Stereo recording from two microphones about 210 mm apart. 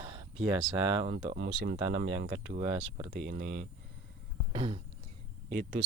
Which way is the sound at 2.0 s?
40° right (ahead or behind).